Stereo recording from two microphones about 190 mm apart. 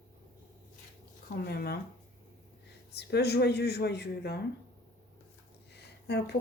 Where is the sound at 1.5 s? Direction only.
55° left (ahead or behind).